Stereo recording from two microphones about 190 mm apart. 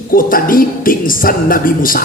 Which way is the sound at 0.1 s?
50° left (ahead or behind).